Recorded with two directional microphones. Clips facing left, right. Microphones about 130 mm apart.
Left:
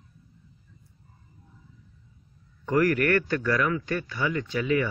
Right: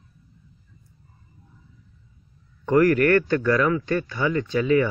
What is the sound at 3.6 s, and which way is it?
Speech, 25° right (ahead or behind).